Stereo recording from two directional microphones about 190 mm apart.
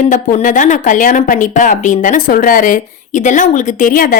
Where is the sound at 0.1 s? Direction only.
45° left (ahead or behind).